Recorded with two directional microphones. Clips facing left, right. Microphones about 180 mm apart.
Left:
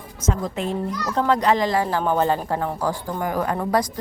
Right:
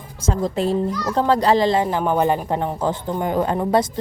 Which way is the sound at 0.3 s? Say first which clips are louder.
Right 4 dB; 35° right (ahead or behind).